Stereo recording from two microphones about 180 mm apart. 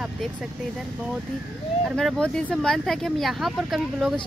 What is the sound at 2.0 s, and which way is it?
Speech, 5° left (ahead or behind).